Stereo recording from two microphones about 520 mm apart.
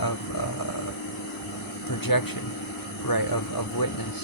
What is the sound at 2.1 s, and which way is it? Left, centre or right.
Speech, left.